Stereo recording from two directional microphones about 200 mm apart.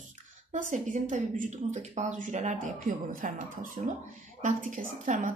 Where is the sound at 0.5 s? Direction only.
40° right (ahead or behind).